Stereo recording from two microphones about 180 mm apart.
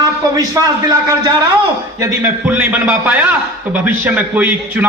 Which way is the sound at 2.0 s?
10° right (ahead or behind).